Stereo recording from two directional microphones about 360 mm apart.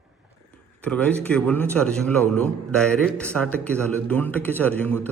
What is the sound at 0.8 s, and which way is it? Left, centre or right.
A man's voice, centre.